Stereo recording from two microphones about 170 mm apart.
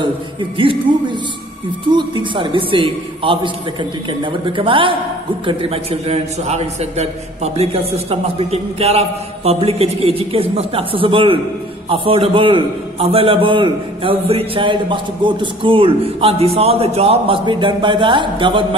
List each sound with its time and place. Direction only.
0.0 s a man's voice: 30° right (ahead or behind)